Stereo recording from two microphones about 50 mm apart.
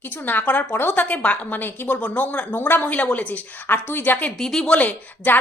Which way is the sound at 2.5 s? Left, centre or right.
Left.